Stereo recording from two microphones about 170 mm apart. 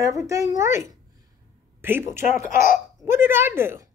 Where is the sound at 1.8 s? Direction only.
15° right (ahead or behind).